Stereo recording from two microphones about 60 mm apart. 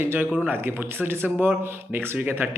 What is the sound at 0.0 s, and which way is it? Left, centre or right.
A man's voice, right.